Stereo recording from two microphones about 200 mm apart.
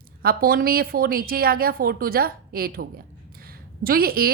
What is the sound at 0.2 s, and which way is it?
A woman's voice, 50° right (ahead or behind).